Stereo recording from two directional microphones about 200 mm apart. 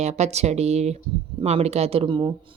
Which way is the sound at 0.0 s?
35° right (ahead or behind).